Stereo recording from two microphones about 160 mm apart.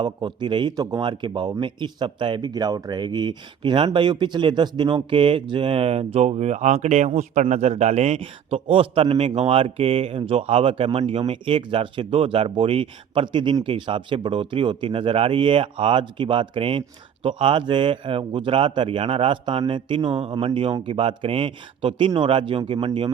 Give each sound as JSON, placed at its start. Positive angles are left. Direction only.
{"t": 0.0, "sound": "speech", "side_deg": -30}